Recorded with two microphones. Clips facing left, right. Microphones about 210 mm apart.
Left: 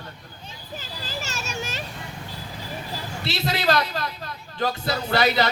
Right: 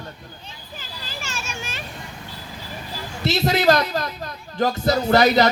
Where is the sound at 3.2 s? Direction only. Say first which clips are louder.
Right 7 dB; 45° right (ahead or behind).